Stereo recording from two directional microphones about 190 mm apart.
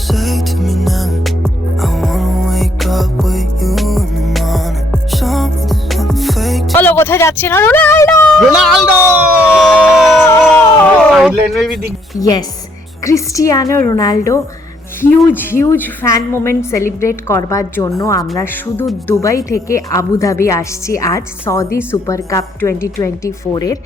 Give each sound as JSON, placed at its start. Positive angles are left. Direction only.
{"t": 0.1, "sound": "music", "side_deg": 0}
{"t": 6.7, "sound": "speech", "side_deg": 10}
{"t": 8.4, "sound": "speech", "side_deg": 0}
{"t": 9.6, "sound": "a sound", "side_deg": 0}
{"t": 12.2, "sound": "a woman's voice", "side_deg": 20}